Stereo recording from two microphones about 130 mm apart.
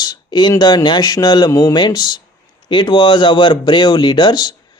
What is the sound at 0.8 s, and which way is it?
Speech, 35° left (ahead or behind).